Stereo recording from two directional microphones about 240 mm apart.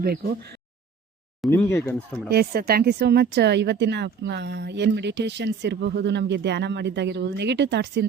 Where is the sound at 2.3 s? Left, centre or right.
Right.